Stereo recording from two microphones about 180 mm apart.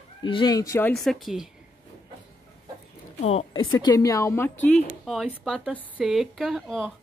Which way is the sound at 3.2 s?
30° left (ahead or behind).